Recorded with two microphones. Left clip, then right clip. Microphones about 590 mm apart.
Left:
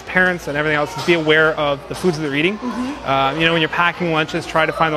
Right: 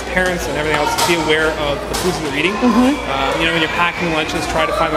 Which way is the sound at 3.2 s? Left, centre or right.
Left.